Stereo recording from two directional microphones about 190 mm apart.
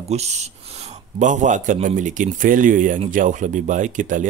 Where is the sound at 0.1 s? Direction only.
35° right (ahead or behind).